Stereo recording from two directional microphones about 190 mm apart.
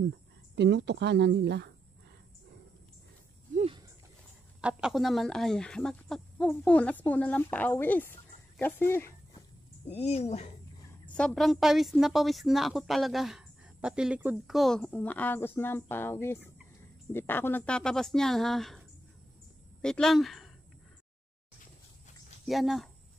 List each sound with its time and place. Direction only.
0.6 s speech: 65° right (ahead or behind)
3.5 s a sound: 30° right (ahead or behind)
4.6 s a woman's voice: 5° right (ahead or behind); by 9.1 s 10° left (ahead or behind)
9.8 s speech: 30° left (ahead or behind)
11.1 s a woman's voice: centre (ahead or behind)
22.5 s a woman's voice: centre (ahead or behind)